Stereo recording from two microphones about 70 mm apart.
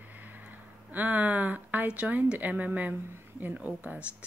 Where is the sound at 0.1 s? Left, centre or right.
Right.